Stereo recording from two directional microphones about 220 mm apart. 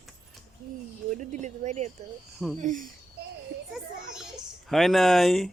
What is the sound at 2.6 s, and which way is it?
Speech, 35° right (ahead or behind).